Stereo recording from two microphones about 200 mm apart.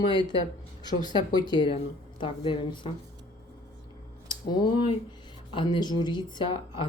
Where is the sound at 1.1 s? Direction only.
20° left (ahead or behind).